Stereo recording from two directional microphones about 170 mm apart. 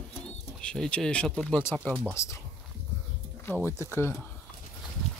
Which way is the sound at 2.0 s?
15° left (ahead or behind).